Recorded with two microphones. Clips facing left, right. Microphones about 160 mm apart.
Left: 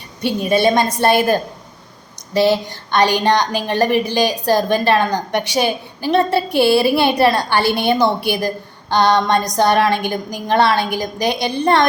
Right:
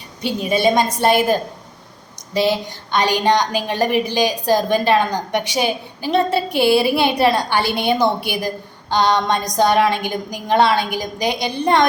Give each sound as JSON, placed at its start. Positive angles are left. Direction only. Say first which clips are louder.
{"t": 0.5, "sound": "a woman's voice", "louder": "left 1 dB", "side_deg": -15}